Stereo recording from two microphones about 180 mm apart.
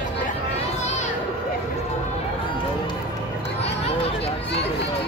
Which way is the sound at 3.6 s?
35° left (ahead or behind).